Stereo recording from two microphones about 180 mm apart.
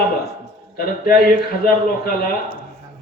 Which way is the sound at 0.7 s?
55° left (ahead or behind).